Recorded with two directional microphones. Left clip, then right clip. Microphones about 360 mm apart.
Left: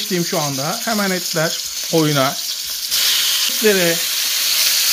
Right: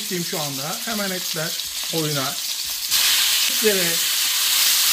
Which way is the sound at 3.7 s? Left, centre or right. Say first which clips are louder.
Left 6 dB; left.